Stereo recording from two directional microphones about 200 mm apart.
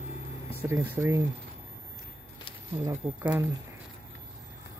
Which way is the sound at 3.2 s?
5° right (ahead or behind).